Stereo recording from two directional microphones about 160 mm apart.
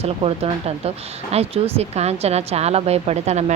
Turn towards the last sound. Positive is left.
turn(degrees=-45)  # may be behind; listen again after turning